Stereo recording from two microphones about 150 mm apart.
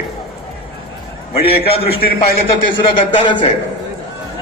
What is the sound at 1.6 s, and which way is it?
A man's voice, 40° left (ahead or behind).